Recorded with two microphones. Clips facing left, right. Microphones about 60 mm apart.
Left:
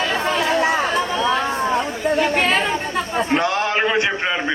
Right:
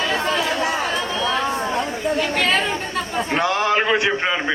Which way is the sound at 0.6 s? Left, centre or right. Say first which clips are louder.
Left 3 dB; left.